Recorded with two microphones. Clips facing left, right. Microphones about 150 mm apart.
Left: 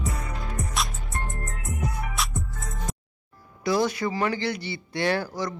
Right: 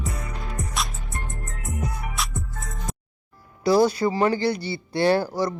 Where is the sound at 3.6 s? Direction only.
35° right (ahead or behind).